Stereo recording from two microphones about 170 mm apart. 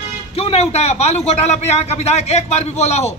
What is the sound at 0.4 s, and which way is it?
Speech, 35° left (ahead or behind).